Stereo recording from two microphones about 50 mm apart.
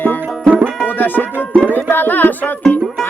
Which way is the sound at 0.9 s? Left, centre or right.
Left.